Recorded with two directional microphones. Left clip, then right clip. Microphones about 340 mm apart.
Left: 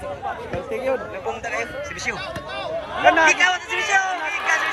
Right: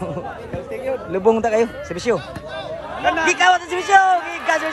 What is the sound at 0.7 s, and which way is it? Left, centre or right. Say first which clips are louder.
Chatter: left 1 dB; left.